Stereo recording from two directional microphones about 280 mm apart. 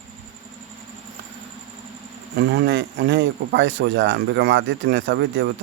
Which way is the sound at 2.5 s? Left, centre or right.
Right.